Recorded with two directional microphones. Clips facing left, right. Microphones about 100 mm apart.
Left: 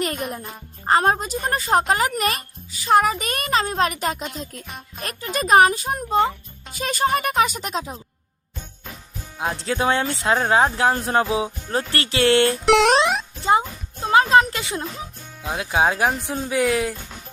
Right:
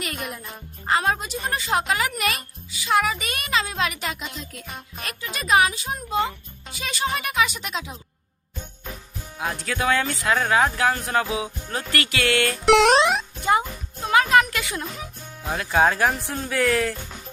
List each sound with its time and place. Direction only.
0.0 s speech: 40° left (ahead or behind)
9.4 s speech: 30° left (ahead or behind)
12.6 s music: centre (ahead or behind)
13.4 s music: 25° left (ahead or behind)
15.4 s speech: 15° left (ahead or behind)